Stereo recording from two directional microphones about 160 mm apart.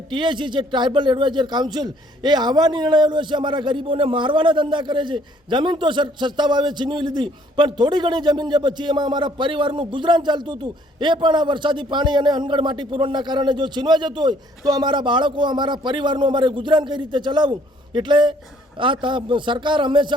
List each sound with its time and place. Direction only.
0.1 s a man's voice: 30° right (ahead or behind)